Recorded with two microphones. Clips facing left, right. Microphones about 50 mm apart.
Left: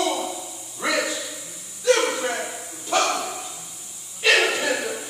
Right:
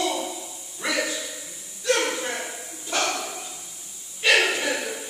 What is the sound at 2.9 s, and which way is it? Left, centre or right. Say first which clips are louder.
Bow-wow: left 4 dB; left.